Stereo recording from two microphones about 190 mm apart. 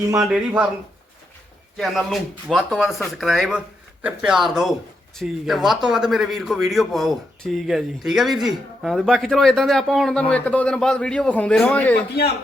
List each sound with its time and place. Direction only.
0.2 s a man's voice: 5° right (ahead or behind)
1.7 s a man's voice: centre (ahead or behind)
12.2 s a man's voice: 55° left (ahead or behind)